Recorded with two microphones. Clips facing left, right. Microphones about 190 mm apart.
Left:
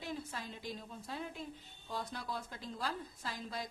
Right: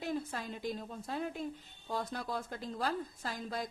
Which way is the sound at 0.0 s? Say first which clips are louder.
Right 6 dB; 50° right (ahead or behind).